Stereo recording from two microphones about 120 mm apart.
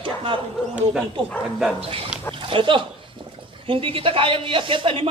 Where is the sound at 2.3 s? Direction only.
45° right (ahead or behind).